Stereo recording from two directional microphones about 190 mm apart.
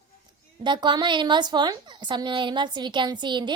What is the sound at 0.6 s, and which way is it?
A woman's voice, 25° right (ahead or behind).